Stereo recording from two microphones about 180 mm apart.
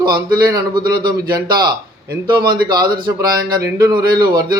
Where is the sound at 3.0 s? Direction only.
20° right (ahead or behind).